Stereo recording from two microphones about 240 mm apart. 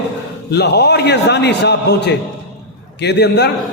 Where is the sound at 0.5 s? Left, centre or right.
Left.